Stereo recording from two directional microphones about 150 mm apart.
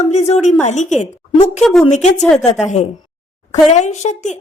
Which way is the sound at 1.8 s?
50° left (ahead or behind).